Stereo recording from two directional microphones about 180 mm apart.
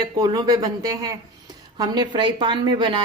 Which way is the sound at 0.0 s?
20° right (ahead or behind).